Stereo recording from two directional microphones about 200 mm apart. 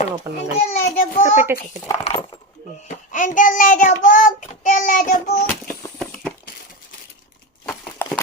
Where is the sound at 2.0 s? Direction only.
25° left (ahead or behind).